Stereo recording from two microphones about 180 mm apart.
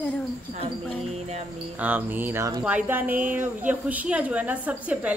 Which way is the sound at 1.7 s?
10° right (ahead or behind).